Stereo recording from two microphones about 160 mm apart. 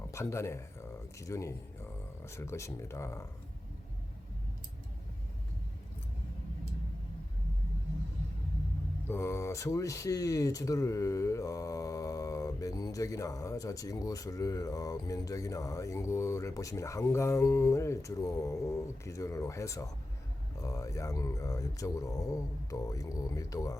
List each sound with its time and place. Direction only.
0.1 s speech: 20° left (ahead or behind)
9.0 s speech: 15° left (ahead or behind)